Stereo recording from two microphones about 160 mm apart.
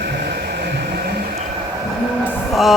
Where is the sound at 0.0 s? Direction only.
75° right (ahead or behind).